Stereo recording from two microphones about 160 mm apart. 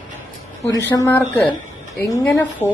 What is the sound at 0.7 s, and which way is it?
Speech, 20° left (ahead or behind).